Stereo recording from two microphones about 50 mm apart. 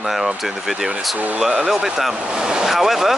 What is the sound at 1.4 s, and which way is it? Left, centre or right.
Speech, centre.